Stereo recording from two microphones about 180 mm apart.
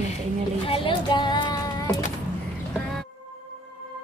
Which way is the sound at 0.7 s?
25° left (ahead or behind).